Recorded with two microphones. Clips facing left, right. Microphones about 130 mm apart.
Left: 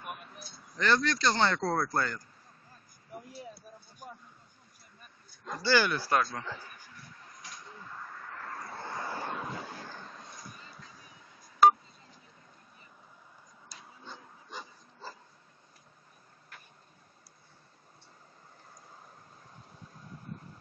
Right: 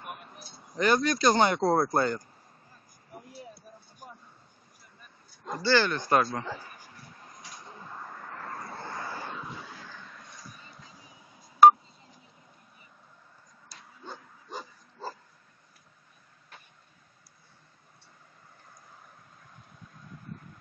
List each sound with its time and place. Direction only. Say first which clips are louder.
0.0 s a sound: even; 20° right (ahead or behind)
0.7 s speech: right 3 dB; 15° right (ahead or behind)
5.6 s speech: right 2 dB; 10° left (ahead or behind)
6.2 s a man's voice: right 5 dB; 35° right (ahead or behind)
7.6 s a sound: right 3 dB; 30° right (ahead or behind)
8.7 s vehicle: left 2 dB; 5° left (ahead or behind)
9.3 s vehicle: left 3 dB; 55° left (ahead or behind); by 10.3 s 35° left (ahead or behind)
10.8 s vehicle: right 1 dB; 20° right (ahead or behind)
14.0 s dog: right 6 dB; 40° right (ahead or behind)